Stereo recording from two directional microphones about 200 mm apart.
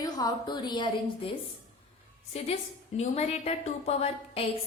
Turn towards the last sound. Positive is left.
turn(degrees=30)  # may be behind; listen again after turning